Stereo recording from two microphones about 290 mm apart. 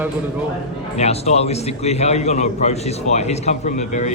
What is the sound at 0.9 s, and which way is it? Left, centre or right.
A man's voice, left.